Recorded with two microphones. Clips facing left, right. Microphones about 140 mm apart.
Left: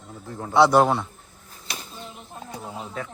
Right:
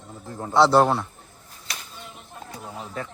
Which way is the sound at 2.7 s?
Centre (ahead or behind).